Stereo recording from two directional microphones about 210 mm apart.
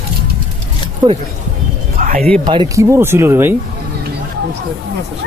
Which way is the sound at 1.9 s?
35° right (ahead or behind).